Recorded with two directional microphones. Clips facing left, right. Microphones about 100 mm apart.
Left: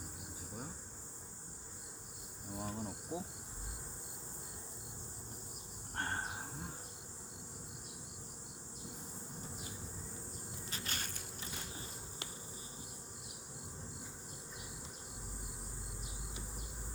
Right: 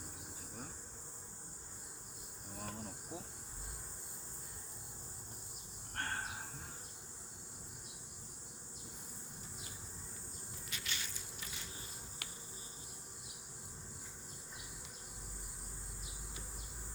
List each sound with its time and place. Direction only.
2.5 s insect: 20° left (ahead or behind)
6.0 s livestock: 20° left (ahead or behind)
10.7 s insect: 40° left (ahead or behind)